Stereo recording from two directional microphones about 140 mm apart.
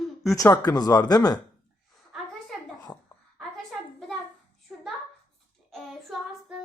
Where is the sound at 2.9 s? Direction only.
30° left (ahead or behind).